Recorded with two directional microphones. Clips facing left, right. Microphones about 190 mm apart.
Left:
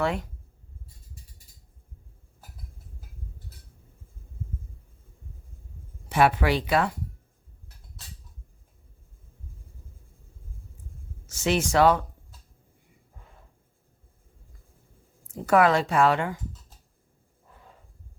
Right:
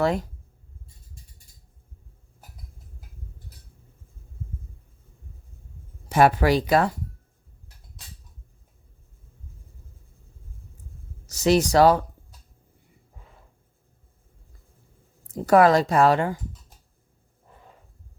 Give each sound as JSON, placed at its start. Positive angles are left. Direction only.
{"t": 0.0, "sound": "speech", "side_deg": -40}
{"t": 6.1, "sound": "speech", "side_deg": -40}
{"t": 11.3, "sound": "speech", "side_deg": -40}
{"t": 15.3, "sound": "speech", "side_deg": -40}